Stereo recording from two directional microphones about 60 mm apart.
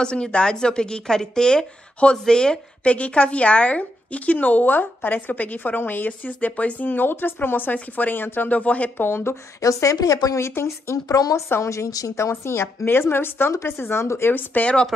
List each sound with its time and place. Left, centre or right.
0.0 s speech: centre
8.9 s speech: left
9.6 s speech: left
10.4 s speech: left
11.1 s a woman's voice: left
11.6 s a woman's voice: left
12.2 s a woman's voice: left
14.3 s a woman's voice: left